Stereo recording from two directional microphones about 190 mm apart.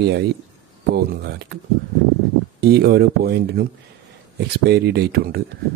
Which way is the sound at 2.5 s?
55° right (ahead or behind).